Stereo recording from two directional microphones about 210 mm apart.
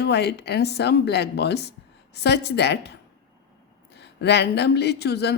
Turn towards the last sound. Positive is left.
turn(degrees=50)  # may be behind; listen again after turning